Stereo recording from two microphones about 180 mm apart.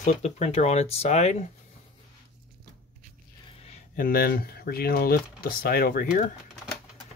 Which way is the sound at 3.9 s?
55° left (ahead or behind).